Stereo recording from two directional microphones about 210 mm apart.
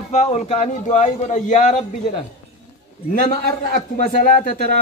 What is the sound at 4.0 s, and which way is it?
Speech, 40° left (ahead or behind).